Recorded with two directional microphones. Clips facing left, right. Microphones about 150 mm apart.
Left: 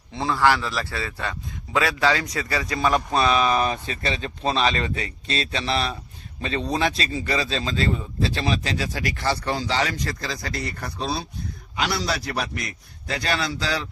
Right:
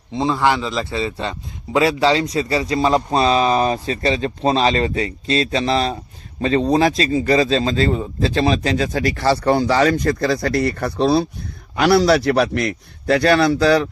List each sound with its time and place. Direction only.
0.1 s a man's voice: 20° right (ahead or behind); by 9.1 s 40° right (ahead or behind)
9.3 s a man's voice: 60° right (ahead or behind)